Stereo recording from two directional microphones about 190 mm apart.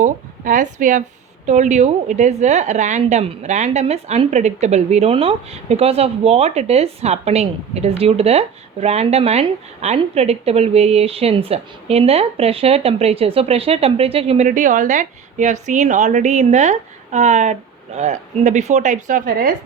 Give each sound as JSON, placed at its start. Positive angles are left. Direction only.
{"t": 0.0, "sound": "a woman's voice", "side_deg": -40}